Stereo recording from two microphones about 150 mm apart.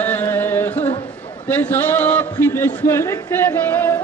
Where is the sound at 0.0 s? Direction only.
15° left (ahead or behind).